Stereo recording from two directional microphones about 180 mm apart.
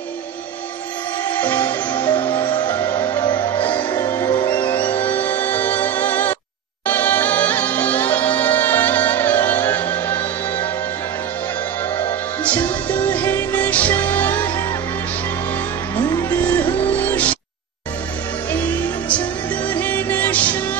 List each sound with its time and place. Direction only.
1.4 s music: 10° left (ahead or behind)
1.9 s music: 25° left (ahead or behind)
5.0 s music: 10° left (ahead or behind)
12.8 s music: 10° left (ahead or behind)
16.0 s music: 15° left (ahead or behind)
18.5 s music: 10° left (ahead or behind)